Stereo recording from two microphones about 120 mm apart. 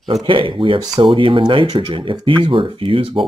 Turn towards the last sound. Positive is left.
turn(degrees=-45)  # may be behind; listen again after turning